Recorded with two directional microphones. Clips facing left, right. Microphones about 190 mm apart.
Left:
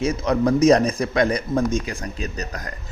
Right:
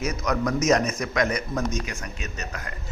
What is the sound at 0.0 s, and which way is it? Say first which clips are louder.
Speech: left 6 dB; 30° left (ahead or behind).